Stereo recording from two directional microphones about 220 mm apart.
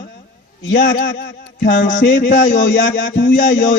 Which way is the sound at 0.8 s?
50° left (ahead or behind).